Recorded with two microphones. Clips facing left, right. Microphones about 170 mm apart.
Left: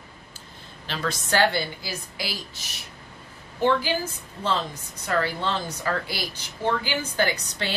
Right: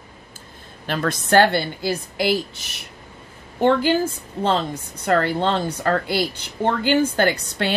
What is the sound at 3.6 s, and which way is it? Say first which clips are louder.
Speech: right 5 dB; 55° right (ahead or behind).